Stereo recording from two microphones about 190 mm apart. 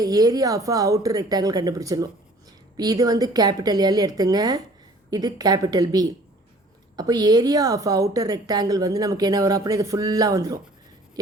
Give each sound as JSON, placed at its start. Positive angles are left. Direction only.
{"t": 0.0, "sound": "a woman's voice", "side_deg": -20}